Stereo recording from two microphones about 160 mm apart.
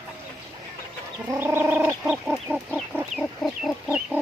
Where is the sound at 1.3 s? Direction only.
15° right (ahead or behind).